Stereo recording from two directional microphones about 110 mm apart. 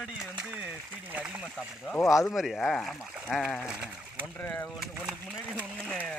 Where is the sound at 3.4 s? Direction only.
15° left (ahead or behind).